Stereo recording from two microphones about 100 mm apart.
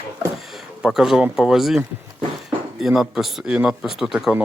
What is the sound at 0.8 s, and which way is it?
Speech, 5° right (ahead or behind).